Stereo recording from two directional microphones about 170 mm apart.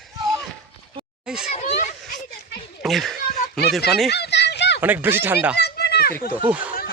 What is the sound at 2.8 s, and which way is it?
A child's voice, centre (ahead or behind).